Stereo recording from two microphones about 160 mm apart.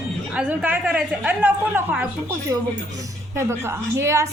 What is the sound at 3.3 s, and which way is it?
Speech, 15° right (ahead or behind).